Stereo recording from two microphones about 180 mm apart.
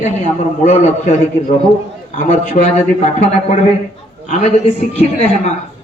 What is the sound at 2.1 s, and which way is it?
A man's voice, 45° left (ahead or behind).